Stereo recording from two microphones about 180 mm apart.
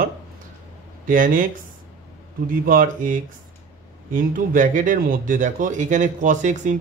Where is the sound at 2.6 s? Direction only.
50° right (ahead or behind).